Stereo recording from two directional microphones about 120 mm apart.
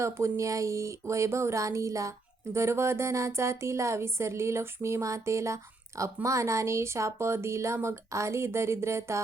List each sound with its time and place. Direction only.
0.0 s speech: 25° right (ahead or behind)